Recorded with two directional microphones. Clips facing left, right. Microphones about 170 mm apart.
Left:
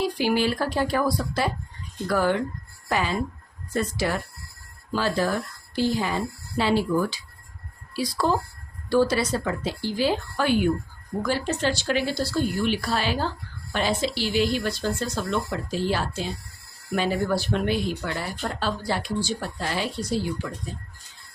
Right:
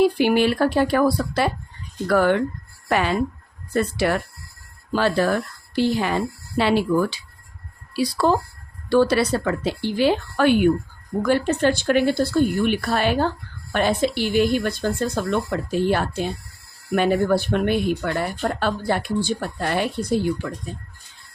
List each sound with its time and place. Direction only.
0.0 s speech: 60° right (ahead or behind)